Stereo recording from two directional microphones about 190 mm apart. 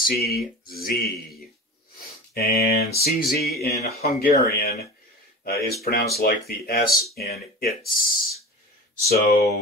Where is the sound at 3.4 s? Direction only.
55° left (ahead or behind).